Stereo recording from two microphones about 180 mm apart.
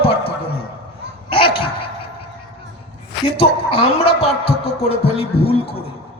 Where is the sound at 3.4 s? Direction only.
30° left (ahead or behind).